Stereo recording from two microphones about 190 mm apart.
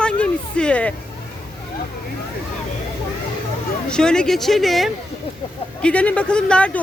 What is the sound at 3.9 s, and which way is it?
Speech, 5° left (ahead or behind).